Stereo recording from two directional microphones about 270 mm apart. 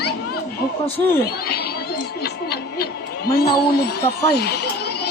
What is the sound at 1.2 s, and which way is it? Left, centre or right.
Speech, left.